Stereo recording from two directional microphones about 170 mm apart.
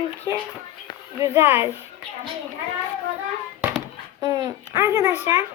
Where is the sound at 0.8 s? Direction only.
35° left (ahead or behind).